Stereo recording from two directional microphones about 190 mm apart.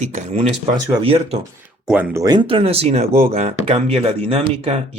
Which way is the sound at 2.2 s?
20° right (ahead or behind).